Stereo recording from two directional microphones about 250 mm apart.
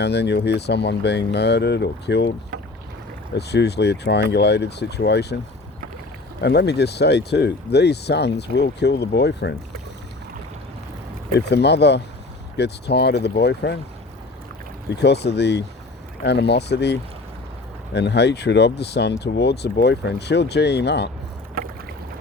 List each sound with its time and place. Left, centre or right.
0.0 s speech: left
3.3 s speech: left
6.4 s speech: left
11.3 s speech: left
15.0 s speech: left